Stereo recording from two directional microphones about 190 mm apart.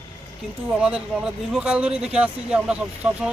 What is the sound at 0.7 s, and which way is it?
Speech, 5° right (ahead or behind).